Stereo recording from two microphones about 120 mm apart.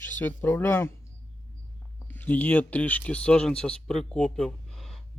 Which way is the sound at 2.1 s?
15° left (ahead or behind).